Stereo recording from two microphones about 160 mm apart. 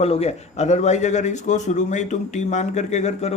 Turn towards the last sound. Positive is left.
turn(degrees=45)  # may be behind; listen again after turning